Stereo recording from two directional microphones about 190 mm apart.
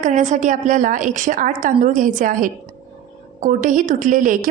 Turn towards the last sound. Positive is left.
turn(degrees=-40)  # may be behind; listen again after turning